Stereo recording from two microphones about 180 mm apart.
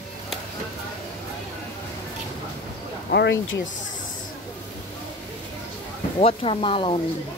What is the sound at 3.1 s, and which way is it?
Speech, 80° left.